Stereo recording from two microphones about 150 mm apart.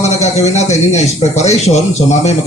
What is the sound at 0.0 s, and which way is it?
Speech, 50° left (ahead or behind).